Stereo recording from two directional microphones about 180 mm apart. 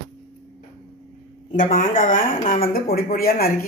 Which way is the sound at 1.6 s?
45° left (ahead or behind).